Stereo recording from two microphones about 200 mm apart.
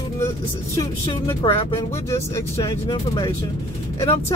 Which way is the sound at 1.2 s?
25° left (ahead or behind).